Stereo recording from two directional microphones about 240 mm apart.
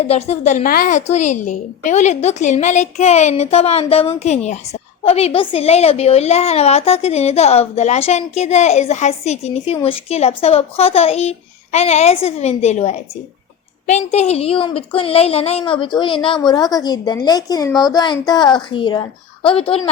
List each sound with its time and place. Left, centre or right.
0.0 s a woman's voice: left